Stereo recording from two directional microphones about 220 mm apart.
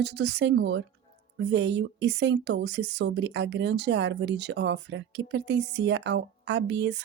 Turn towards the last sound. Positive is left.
turn(degrees=-50)  # may be behind; listen again after turning